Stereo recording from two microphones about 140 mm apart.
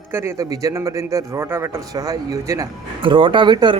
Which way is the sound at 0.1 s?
15° right (ahead or behind).